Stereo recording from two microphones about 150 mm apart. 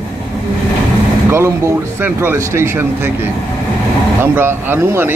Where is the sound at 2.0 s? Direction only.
15° right (ahead or behind).